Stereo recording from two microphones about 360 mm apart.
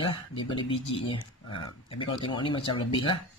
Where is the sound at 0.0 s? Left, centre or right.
Centre.